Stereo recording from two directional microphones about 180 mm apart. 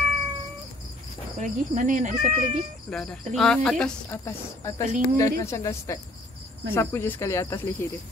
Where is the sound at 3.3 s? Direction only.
5° left (ahead or behind).